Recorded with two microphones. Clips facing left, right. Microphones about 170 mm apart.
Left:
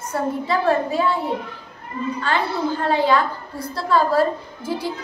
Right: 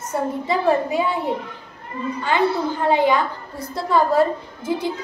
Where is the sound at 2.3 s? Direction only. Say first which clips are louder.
Right 3 dB; 20° right (ahead or behind).